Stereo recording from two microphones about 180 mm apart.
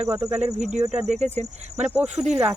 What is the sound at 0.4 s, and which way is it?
Speech, 40° right (ahead or behind).